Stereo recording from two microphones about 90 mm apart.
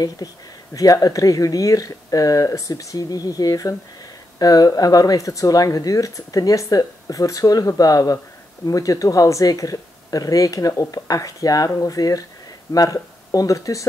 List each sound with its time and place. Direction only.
0.2 s speech: 45° left (ahead or behind)